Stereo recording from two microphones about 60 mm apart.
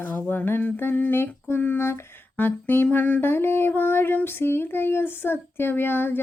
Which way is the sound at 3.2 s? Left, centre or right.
Left.